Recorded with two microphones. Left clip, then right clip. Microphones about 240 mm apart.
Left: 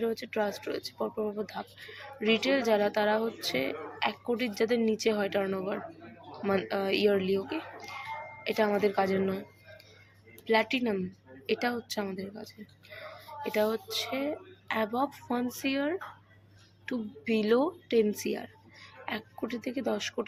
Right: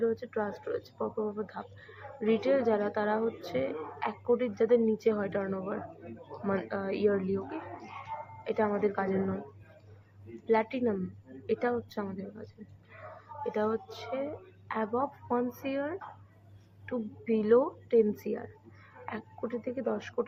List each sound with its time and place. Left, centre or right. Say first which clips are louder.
0.0 s speech: left 1 dB; left
10.4 s speech: left 1 dB; left
13.6 s speech: left 4 dB; left
17.2 s speech: right 1 dB; left